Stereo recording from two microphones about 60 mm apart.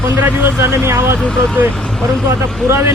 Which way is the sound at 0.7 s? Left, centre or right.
Right.